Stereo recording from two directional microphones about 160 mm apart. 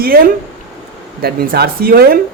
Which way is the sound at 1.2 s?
75° right (ahead or behind).